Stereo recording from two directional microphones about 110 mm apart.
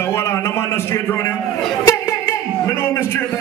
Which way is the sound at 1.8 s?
25° left (ahead or behind).